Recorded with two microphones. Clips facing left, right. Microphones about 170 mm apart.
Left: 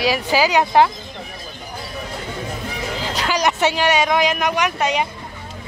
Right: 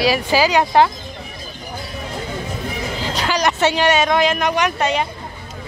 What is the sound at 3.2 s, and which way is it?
Speech, 15° left (ahead or behind).